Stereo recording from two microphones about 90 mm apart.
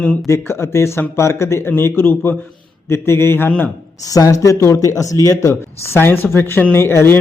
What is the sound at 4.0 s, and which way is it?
A man's voice, 40° left (ahead or behind).